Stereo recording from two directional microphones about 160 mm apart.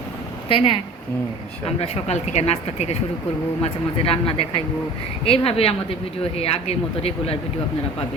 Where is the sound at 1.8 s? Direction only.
45° left (ahead or behind).